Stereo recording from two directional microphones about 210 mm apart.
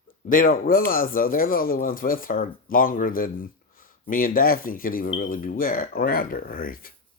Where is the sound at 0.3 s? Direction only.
40° left (ahead or behind).